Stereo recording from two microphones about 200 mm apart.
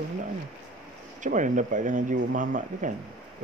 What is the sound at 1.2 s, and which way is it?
Speech, 40° right (ahead or behind).